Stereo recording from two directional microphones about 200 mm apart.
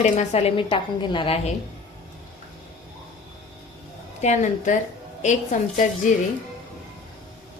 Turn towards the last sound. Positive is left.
turn(degrees=40)  # may be behind; listen again after turning